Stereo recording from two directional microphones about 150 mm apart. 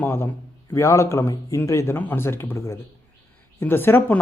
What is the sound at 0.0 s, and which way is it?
Speech, 15° left (ahead or behind).